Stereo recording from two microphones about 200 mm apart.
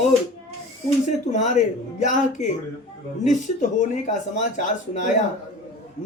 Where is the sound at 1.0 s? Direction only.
35° left (ahead or behind).